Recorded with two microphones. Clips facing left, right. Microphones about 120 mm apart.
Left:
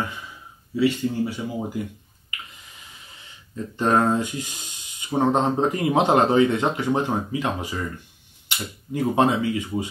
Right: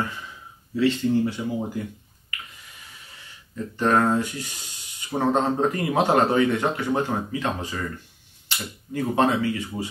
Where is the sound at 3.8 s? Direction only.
15° left (ahead or behind).